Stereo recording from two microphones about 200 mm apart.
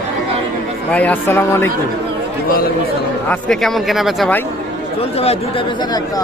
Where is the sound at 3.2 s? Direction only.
5° left (ahead or behind).